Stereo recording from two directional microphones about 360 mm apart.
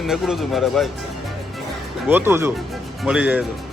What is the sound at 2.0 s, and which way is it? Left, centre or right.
A man's voice, centre.